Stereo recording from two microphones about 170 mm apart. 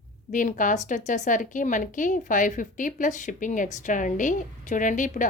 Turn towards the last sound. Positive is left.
turn(degrees=50)  # may be behind; listen again after turning